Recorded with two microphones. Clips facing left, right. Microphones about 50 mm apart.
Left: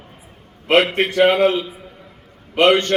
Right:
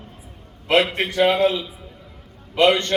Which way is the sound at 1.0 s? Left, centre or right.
Left.